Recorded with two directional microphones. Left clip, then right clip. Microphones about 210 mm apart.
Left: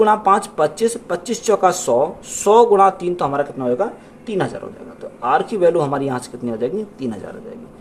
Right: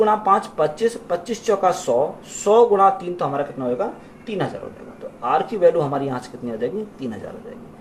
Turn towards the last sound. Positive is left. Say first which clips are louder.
# left 3 dB
turn(degrees=50)  # may be behind; listen again after turning